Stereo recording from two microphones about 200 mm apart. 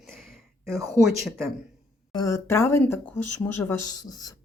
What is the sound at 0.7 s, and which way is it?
Speech, 15° right (ahead or behind).